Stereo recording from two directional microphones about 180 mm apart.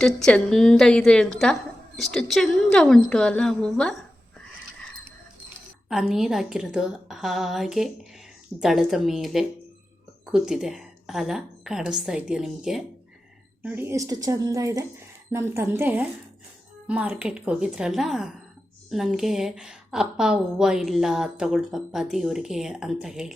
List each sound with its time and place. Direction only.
0.0 s a woman's voice: 5° left (ahead or behind)